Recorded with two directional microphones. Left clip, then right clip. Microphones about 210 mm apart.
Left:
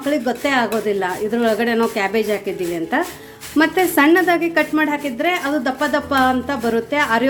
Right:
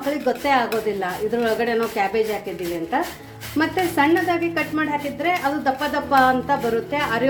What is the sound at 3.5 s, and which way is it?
A woman's voice, 25° left (ahead or behind).